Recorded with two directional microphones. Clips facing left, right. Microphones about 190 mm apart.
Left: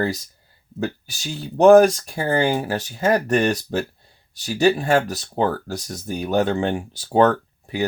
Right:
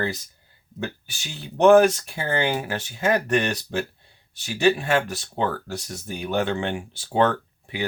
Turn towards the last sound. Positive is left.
turn(degrees=40)  # may be behind; listen again after turning